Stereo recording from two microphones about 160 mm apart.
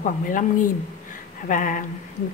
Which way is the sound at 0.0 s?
55° left (ahead or behind).